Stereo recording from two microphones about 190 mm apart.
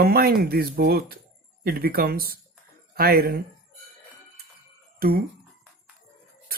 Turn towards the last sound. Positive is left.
turn(degrees=-50)  # may be behind; listen again after turning